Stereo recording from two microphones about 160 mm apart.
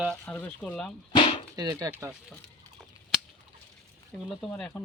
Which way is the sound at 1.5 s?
20° right (ahead or behind).